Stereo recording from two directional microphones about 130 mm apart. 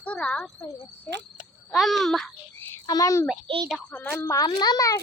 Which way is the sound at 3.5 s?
45° right (ahead or behind).